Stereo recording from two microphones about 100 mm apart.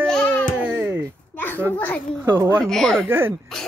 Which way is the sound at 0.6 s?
20° right (ahead or behind).